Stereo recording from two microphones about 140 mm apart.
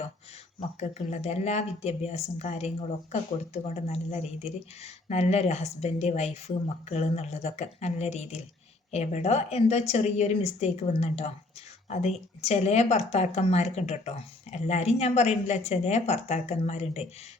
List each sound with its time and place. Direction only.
0.8 s speech: 50° left (ahead or behind)